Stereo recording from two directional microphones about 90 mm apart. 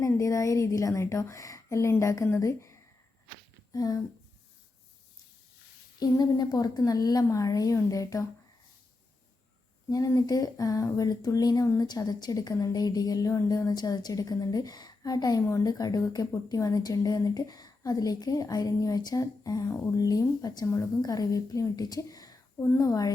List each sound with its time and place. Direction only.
0.0 s a woman's voice: 35° left (ahead or behind)
6.0 s a woman's voice: 45° left (ahead or behind)
9.9 s a woman's voice: 40° left (ahead or behind)